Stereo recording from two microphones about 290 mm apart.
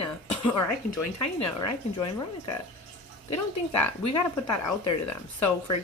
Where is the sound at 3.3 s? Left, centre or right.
Left.